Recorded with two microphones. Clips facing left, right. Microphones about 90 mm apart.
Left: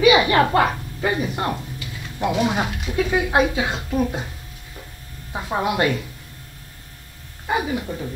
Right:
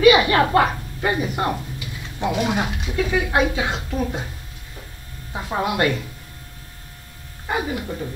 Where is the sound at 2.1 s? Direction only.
10° left (ahead or behind).